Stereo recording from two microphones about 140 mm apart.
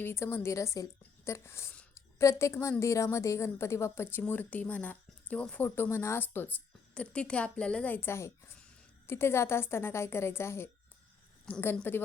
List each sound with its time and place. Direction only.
0.0 s a woman's voice: 20° left (ahead or behind)